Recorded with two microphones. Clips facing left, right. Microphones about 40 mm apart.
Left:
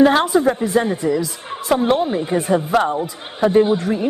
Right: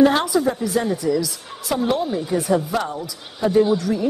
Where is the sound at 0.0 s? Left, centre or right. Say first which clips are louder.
Left 3 dB; left.